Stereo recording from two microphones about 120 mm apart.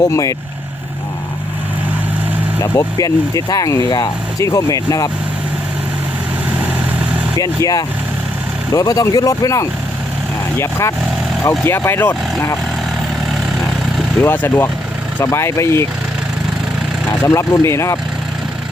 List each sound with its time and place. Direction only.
0.1 s speech: 30° left (ahead or behind)
2.6 s speech: 25° left (ahead or behind)
7.3 s speech: 30° left (ahead or behind)
14.3 s speech: 20° left (ahead or behind)
17.2 s speech: 25° left (ahead or behind)